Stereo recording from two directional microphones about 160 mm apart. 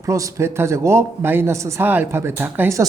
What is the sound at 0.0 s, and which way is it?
A man's voice, 20° right (ahead or behind).